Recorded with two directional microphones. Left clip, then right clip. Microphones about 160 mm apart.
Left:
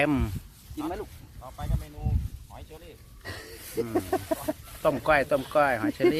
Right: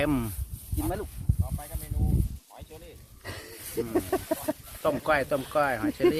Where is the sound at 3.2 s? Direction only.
40° right (ahead or behind).